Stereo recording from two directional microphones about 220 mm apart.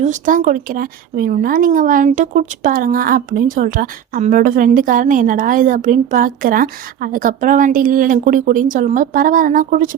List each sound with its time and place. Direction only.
0.0 s speech: 35° right (ahead or behind)